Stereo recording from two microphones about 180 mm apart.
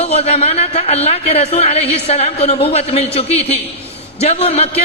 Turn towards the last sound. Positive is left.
turn(degrees=35)  # may be behind; listen again after turning